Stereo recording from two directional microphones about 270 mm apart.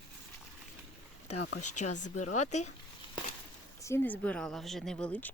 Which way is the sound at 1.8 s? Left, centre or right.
Left.